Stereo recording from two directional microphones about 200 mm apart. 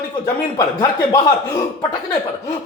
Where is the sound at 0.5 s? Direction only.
15° left (ahead or behind).